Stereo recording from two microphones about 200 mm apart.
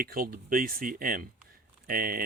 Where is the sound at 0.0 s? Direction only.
45° right (ahead or behind).